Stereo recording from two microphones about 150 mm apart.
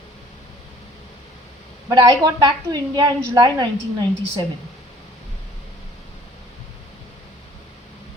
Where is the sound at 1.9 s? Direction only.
30° right (ahead or behind).